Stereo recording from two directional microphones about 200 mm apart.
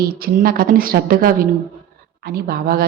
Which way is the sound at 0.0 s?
50° right (ahead or behind).